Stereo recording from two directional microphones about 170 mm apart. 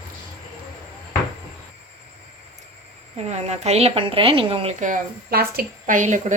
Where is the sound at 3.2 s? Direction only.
40° right (ahead or behind).